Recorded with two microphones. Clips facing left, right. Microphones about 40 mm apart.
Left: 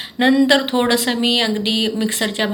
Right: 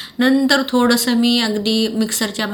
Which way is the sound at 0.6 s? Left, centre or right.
Left.